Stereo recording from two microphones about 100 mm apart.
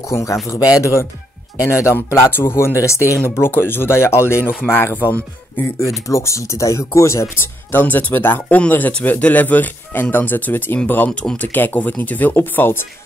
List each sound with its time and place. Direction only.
0.1 s speech: 30° left (ahead or behind)
7.7 s speech: 15° left (ahead or behind)